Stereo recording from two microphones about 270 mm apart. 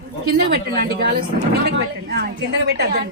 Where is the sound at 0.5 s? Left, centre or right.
Right.